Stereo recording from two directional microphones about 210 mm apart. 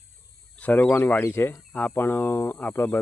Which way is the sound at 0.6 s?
5° left (ahead or behind).